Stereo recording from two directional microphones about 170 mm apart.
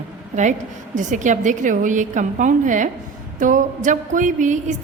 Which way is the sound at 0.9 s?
45° right (ahead or behind).